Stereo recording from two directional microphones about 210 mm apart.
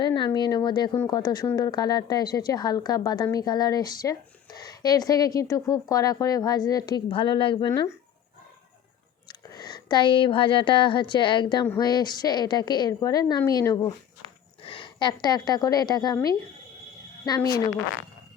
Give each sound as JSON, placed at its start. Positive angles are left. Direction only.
{"t": 0.0, "sound": "a woman's voice", "side_deg": 20}
{"t": 9.5, "sound": "a woman's voice", "side_deg": 20}